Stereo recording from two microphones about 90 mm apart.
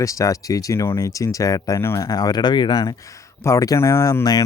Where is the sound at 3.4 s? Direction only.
35° left (ahead or behind).